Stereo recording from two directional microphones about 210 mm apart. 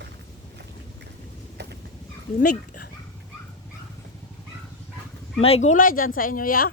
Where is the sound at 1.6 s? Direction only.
50° right (ahead or behind).